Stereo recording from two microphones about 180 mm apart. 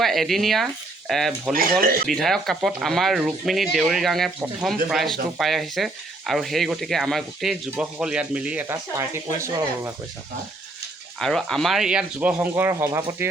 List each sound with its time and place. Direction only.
0.0 s speech: centre (ahead or behind)
1.8 s speech: 55° right (ahead or behind)
2.0 s speech: centre (ahead or behind); by 9.9 s 15° right (ahead or behind)
11.2 s speech: centre (ahead or behind); by 13.2 s 15° right (ahead or behind)